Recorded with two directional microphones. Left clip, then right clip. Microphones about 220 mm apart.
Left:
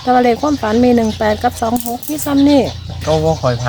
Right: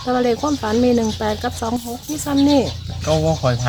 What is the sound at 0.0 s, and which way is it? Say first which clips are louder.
Speech: left 6 dB; 20° left (ahead or behind).